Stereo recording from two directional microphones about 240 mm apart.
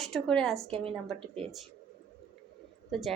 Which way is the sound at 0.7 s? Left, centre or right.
Right.